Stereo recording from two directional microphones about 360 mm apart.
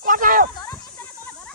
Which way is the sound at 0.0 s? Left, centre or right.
Right.